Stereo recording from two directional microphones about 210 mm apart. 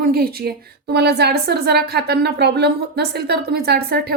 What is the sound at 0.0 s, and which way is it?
A woman's voice, 45° right (ahead or behind).